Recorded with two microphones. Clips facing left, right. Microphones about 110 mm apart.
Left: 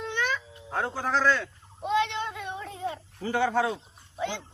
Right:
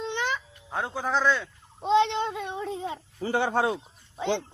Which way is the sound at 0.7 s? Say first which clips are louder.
Even; 10° right (ahead or behind).